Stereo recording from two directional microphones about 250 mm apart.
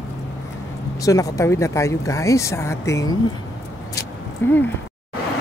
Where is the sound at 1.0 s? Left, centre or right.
Centre.